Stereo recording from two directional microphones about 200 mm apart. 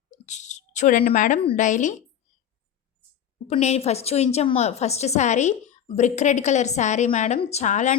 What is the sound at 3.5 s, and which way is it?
A woman's voice, 30° left (ahead or behind).